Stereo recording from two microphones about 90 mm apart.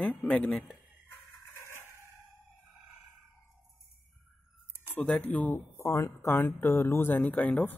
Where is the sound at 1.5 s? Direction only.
30° left (ahead or behind).